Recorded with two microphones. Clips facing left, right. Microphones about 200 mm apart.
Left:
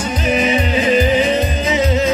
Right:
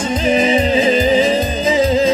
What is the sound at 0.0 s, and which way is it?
Music, 30° right (ahead or behind).